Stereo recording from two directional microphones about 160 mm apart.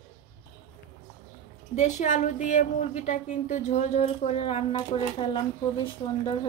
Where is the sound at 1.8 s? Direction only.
45° left (ahead or behind).